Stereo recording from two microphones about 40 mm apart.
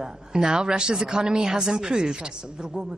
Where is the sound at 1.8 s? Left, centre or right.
Right.